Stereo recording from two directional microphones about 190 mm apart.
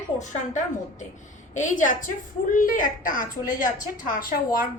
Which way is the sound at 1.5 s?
40° left (ahead or behind).